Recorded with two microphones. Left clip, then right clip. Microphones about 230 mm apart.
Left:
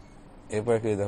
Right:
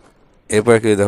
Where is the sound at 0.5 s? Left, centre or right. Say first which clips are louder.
Right 13 dB; right.